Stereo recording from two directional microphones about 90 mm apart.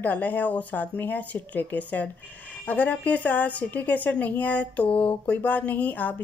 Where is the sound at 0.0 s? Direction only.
20° left (ahead or behind).